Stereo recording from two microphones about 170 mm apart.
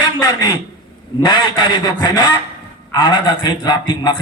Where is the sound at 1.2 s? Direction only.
30° left (ahead or behind).